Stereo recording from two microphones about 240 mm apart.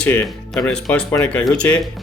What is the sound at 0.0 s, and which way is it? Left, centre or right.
Speech, centre.